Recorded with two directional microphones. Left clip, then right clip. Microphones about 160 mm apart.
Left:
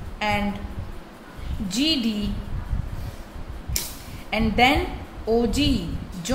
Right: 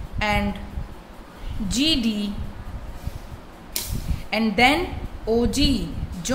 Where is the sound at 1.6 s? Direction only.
20° right (ahead or behind).